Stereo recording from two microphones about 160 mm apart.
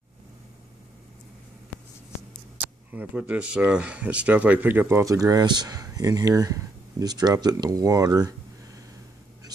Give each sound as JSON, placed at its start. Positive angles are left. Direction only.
{"t": 2.9, "sound": "speech", "side_deg": -10}